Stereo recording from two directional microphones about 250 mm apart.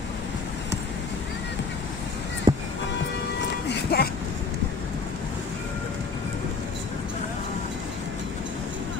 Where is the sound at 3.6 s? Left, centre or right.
Left.